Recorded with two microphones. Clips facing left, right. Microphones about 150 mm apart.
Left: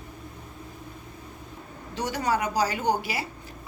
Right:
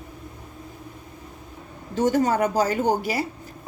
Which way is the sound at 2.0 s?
50° right (ahead or behind).